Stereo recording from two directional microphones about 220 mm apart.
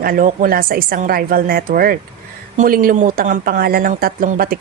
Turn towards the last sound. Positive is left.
turn(degrees=-40)  # may be behind; listen again after turning